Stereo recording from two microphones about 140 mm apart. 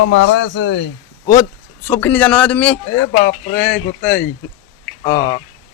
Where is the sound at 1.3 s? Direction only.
20° left (ahead or behind).